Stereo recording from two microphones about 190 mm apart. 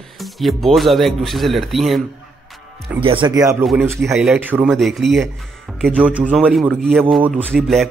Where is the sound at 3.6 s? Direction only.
5° right (ahead or behind).